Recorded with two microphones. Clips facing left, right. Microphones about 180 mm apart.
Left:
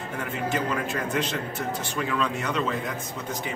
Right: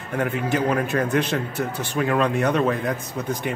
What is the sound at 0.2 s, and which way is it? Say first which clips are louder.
A man's voice: right 6 dB; 60° right (ahead or behind).